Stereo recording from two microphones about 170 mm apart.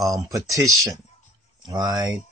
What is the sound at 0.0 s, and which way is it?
Speech, 20° right (ahead or behind).